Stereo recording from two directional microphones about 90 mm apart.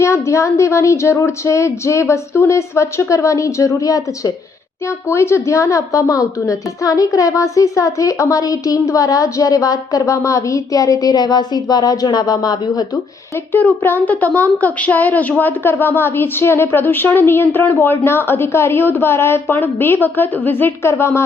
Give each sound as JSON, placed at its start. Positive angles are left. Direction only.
{"t": 0.0, "sound": "a woman's voice", "side_deg": 35}
{"t": 5.0, "sound": "a woman's voice", "side_deg": 30}
{"t": 13.5, "sound": "a woman's voice", "side_deg": 20}